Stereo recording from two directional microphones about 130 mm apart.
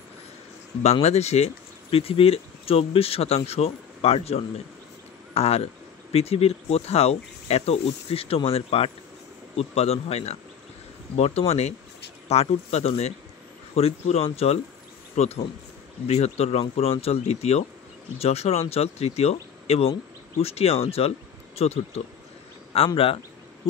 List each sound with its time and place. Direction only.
1.0 s speech: 55° left (ahead or behind)
22.7 s a man's voice: 45° left (ahead or behind)